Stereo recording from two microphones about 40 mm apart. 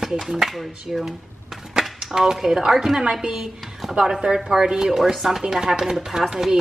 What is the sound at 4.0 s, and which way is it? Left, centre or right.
Speech, centre.